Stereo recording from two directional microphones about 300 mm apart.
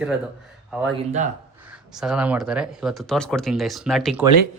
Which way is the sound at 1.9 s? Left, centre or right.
Centre.